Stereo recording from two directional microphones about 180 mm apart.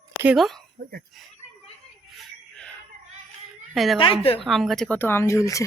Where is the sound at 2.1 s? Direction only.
5° left (ahead or behind).